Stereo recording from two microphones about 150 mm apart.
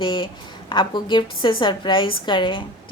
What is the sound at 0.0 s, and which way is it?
Speech, 35° left (ahead or behind).